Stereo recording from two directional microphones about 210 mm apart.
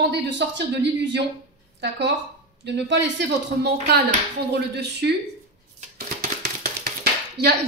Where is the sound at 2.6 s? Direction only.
55° right (ahead or behind).